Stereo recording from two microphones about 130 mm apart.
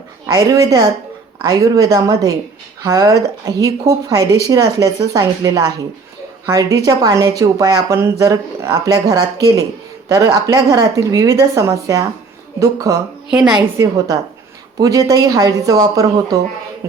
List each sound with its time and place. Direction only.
0.3 s speech: 25° right (ahead or behind)
13.3 s a woman's voice: 10° right (ahead or behind)
13.7 s speech: 25° right (ahead or behind)